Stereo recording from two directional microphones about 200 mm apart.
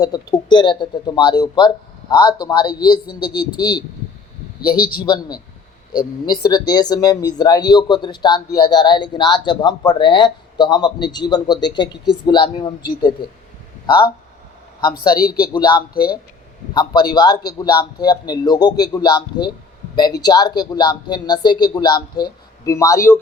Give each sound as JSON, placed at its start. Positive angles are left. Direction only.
{"t": 0.0, "sound": "speech", "side_deg": 20}
{"t": 4.6, "sound": "a man's voice", "side_deg": 45}
{"t": 5.0, "sound": "speech", "side_deg": 20}
{"t": 15.5, "sound": "speech", "side_deg": 20}